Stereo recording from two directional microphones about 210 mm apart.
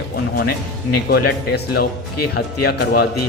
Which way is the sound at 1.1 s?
50° left (ahead or behind).